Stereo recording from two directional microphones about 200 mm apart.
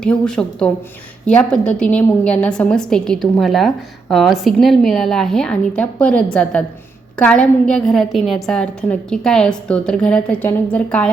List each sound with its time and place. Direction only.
0.0 s a woman's voice: 5° left (ahead or behind)